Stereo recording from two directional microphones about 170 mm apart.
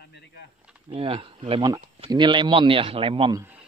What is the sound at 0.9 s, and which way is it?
Speech, 30° right (ahead or behind).